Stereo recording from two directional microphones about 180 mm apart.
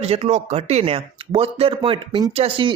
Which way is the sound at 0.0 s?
35° right (ahead or behind).